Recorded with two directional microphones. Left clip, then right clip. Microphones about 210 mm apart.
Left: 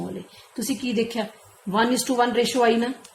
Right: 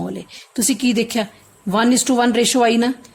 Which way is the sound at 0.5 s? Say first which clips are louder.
Right 7 dB; 55° right (ahead or behind).